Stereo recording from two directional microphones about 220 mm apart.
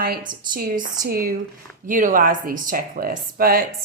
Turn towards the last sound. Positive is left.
turn(degrees=-40)  # may be behind; listen again after turning